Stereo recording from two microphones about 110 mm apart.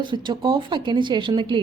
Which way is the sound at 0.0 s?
45° right (ahead or behind).